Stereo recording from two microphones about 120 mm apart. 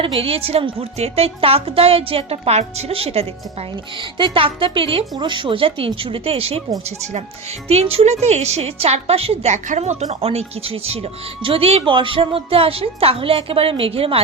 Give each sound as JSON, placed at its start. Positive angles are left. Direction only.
{"t": 0.2, "sound": "a woman's voice", "side_deg": -55}
{"t": 7.7, "sound": "a woman's voice", "side_deg": -60}